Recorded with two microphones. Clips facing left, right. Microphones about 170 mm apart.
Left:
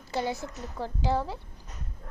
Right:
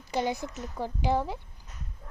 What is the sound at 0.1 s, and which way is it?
A woman's voice, 15° right (ahead or behind).